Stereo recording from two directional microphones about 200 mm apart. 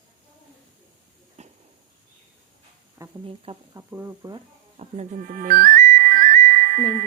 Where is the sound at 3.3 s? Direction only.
30° right (ahead or behind).